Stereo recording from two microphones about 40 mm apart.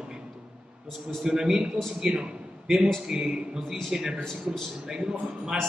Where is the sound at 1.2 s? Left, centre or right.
Centre.